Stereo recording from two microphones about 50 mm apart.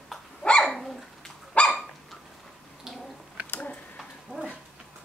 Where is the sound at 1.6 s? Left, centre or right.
Left.